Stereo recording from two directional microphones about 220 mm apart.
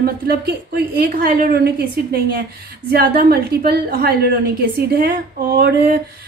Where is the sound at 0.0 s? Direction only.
45° right (ahead or behind).